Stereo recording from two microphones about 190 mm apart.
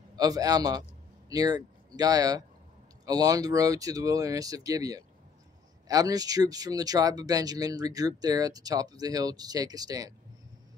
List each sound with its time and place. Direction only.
0.1 s a man's voice: 20° right (ahead or behind)